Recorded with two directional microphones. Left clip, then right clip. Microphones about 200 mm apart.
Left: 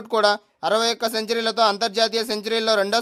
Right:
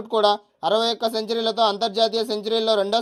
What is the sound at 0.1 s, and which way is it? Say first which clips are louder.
Speech: even; 15° left (ahead or behind).